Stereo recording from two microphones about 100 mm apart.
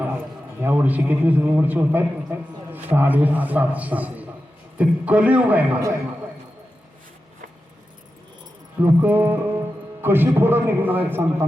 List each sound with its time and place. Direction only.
0.6 s a man's voice: 15° right (ahead or behind)
8.8 s a man's voice: 15° right (ahead or behind)